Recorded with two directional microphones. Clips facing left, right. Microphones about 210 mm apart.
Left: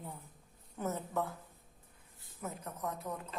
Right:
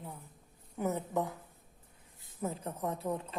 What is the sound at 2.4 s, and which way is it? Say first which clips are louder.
Speech: right 5 dB; 30° right (ahead or behind).